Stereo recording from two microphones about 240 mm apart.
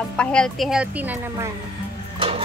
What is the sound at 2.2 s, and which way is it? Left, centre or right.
Music, right.